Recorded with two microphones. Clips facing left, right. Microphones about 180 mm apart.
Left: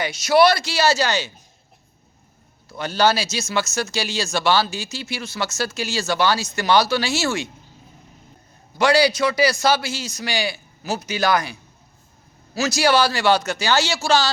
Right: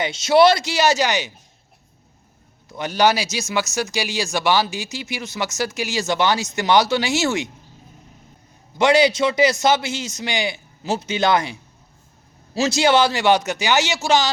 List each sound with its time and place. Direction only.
0.0 s a man's voice: 25° right (ahead or behind)
2.6 s speech: 15° right (ahead or behind)
8.8 s a man's voice: 20° right (ahead or behind)